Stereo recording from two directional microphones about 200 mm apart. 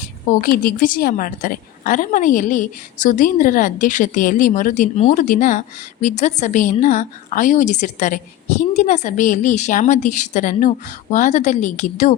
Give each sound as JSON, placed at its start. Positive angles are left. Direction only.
{"t": 0.3, "sound": "a woman's voice", "side_deg": 45}